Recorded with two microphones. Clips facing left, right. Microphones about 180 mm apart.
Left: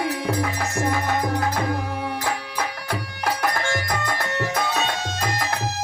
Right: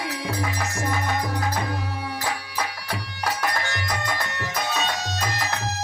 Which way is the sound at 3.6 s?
55° left (ahead or behind).